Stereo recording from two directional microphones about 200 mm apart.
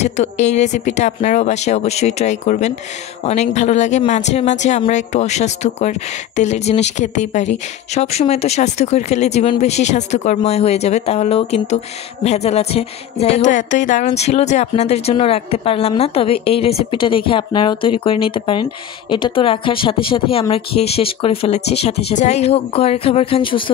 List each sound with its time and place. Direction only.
0.0 s speech: 35° left (ahead or behind)